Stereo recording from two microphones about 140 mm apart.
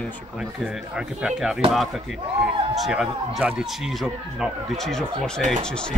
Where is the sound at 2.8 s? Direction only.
5° right (ahead or behind).